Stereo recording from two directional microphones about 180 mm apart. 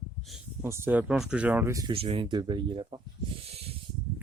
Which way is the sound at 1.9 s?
30° right (ahead or behind).